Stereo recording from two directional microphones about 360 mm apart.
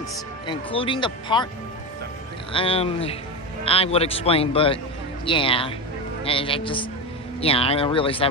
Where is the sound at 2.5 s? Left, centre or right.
Centre.